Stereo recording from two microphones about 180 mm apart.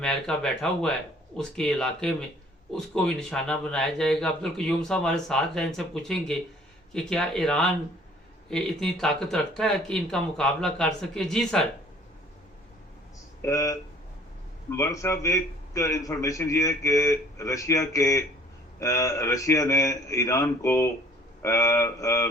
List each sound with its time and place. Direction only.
0.0 s a man's voice: 5° left (ahead or behind)
13.4 s a man's voice: 15° left (ahead or behind)